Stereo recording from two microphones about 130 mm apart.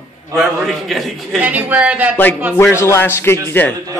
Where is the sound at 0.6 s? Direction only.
Centre (ahead or behind).